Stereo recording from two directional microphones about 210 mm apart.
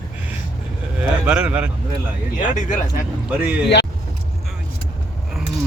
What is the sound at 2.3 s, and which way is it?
Speech, 35° left (ahead or behind).